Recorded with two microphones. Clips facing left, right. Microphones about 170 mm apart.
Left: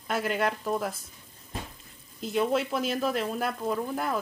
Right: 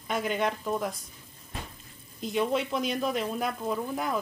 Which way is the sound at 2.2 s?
Centre (ahead or behind).